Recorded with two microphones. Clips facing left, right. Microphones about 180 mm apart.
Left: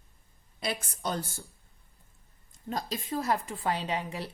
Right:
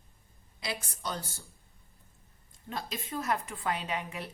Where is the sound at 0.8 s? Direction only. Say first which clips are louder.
Left 4 dB; 50° left (ahead or behind).